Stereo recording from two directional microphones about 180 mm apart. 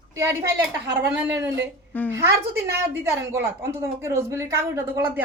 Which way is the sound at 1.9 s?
10° left (ahead or behind).